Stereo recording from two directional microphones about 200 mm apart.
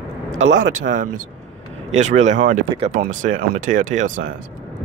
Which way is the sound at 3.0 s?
40° right (ahead or behind).